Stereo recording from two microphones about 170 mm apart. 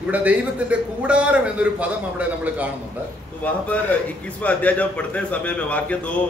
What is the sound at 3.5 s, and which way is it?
A man's voice, 10° left (ahead or behind).